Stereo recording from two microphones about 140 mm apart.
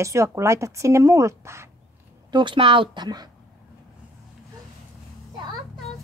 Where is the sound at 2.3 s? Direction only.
30° right (ahead or behind).